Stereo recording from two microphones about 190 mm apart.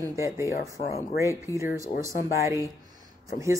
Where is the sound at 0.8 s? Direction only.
30° left (ahead or behind).